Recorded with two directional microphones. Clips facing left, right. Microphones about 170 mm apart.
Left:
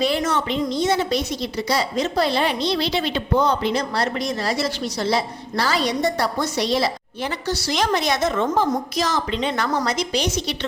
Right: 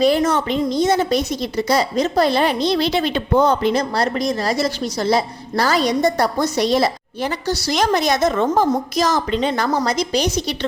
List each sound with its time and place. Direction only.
0.0 s a woman's voice: 40° right (ahead or behind)